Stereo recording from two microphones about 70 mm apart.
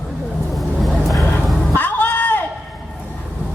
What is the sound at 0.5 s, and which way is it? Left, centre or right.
Vehicle, centre.